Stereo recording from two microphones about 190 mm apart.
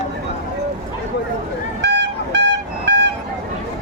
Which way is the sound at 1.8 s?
65° right (ahead or behind).